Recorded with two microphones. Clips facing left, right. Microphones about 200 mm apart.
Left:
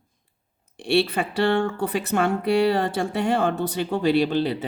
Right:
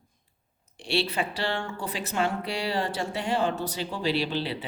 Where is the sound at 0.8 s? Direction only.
55° left (ahead or behind).